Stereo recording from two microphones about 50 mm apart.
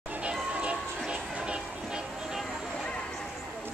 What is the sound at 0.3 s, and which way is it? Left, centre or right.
Music, right.